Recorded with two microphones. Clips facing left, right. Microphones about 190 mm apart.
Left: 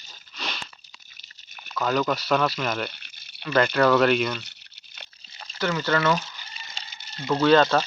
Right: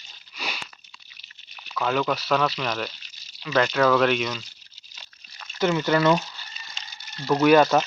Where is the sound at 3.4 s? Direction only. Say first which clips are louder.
Left 1 dB; centre (ahead or behind).